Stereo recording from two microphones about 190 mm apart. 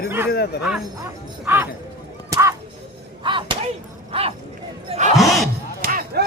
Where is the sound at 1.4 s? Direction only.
10° right (ahead or behind).